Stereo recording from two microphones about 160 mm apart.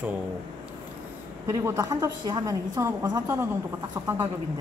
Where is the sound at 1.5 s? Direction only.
20° right (ahead or behind).